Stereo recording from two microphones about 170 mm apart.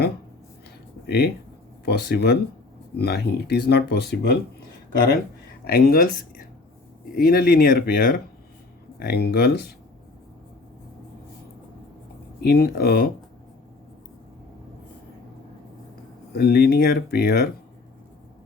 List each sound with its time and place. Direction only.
1.0 s speech: 70° left (ahead or behind)
5.6 s speech: 65° left (ahead or behind)
12.4 s speech: 65° left (ahead or behind)
16.3 s speech: 65° left (ahead or behind)